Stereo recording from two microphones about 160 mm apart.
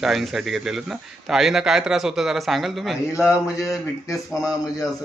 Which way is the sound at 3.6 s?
20° left (ahead or behind).